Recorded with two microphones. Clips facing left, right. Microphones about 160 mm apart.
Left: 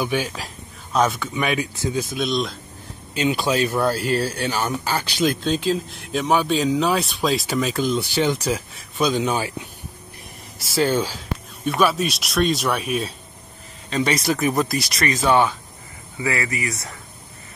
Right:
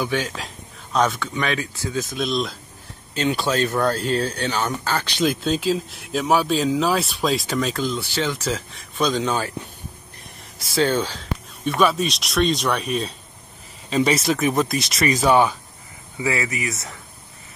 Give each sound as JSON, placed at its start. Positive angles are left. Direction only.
{"t": 0.0, "sound": "speech", "side_deg": 10}
{"t": 2.1, "sound": "speech", "side_deg": 0}
{"t": 3.2, "sound": "speech", "side_deg": 10}
{"t": 5.3, "sound": "speech", "side_deg": -5}
{"t": 10.6, "sound": "speech", "side_deg": 0}